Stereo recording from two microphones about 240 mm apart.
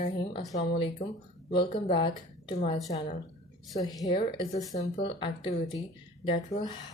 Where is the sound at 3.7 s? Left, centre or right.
Centre.